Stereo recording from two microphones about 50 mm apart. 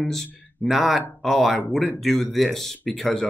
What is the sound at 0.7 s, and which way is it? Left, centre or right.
Speech, centre.